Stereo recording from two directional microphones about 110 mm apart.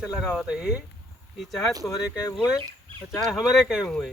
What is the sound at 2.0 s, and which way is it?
Speech, 35° left (ahead or behind).